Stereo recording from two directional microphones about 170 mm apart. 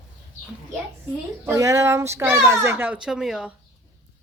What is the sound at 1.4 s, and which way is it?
Speech, 20° right (ahead or behind).